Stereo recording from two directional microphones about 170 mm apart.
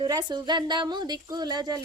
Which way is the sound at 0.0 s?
25° right (ahead or behind).